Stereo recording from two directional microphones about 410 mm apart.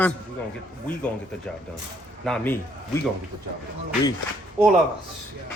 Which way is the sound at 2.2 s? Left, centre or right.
Centre.